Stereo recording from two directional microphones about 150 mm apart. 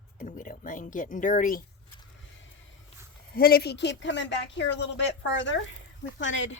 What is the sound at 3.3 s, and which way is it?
Speech, 90° left.